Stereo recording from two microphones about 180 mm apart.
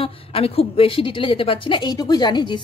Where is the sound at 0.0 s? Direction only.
35° left (ahead or behind).